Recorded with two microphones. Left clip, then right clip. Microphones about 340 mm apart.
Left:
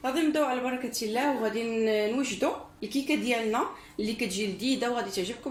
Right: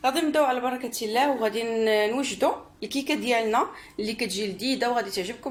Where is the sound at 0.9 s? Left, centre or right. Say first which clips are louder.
Right 6 dB; right.